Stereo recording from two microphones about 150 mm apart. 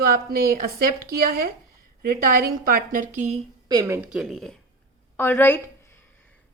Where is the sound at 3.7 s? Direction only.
20° right (ahead or behind).